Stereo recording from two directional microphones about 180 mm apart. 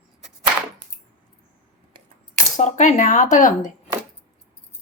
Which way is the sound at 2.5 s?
40° left (ahead or behind).